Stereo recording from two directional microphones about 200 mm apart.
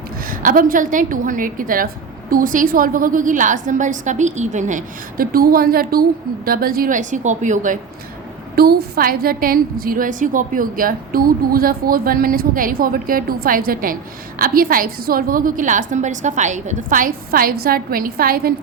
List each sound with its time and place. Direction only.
0.2 s a woman's voice: 45° right (ahead or behind)